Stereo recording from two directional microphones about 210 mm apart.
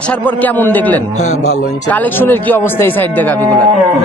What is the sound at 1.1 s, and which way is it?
Speech, 35° left (ahead or behind).